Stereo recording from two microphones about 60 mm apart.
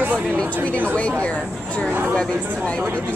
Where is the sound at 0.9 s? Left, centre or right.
Centre.